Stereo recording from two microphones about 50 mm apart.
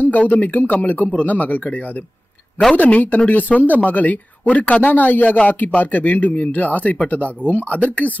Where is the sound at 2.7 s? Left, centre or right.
Left.